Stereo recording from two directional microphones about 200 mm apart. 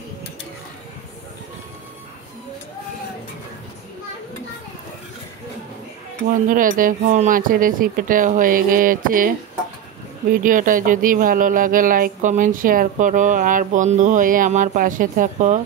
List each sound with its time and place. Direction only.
6.3 s speech: 40° right (ahead or behind)
10.3 s speech: 40° right (ahead or behind)